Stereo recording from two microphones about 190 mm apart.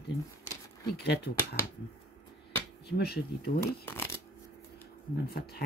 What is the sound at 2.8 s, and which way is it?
Speech, 55° left (ahead or behind).